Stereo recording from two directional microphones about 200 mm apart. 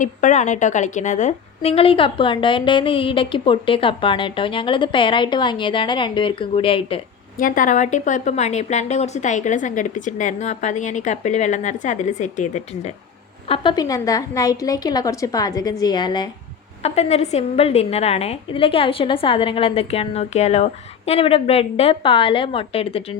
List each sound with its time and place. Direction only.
0.0 s a woman's voice: 40° left (ahead or behind)
7.3 s a woman's voice: 40° left (ahead or behind)
13.5 s a woman's voice: 25° left (ahead or behind)
16.8 s a woman's voice: 30° left (ahead or behind)